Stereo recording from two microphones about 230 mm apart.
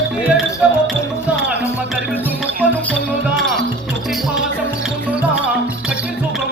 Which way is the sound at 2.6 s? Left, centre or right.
Centre.